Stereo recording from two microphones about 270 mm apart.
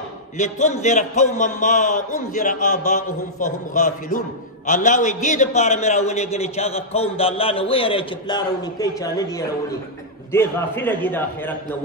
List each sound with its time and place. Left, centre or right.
0.4 s a man's voice: left; by 11.5 s centre